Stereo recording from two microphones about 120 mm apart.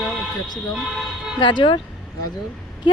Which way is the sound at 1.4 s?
40° left (ahead or behind).